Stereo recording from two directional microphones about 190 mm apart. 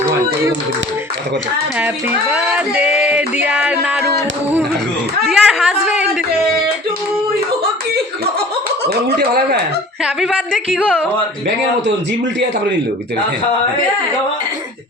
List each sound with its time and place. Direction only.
2.3 s music: 5° right (ahead or behind)
5.3 s speech: 5° right (ahead or behind)
8.8 s speech: 60° right (ahead or behind)
10.0 s speech: 5° right (ahead or behind)